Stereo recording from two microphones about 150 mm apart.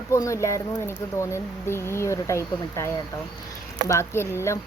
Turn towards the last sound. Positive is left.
turn(degrees=15)  # may be behind; listen again after turning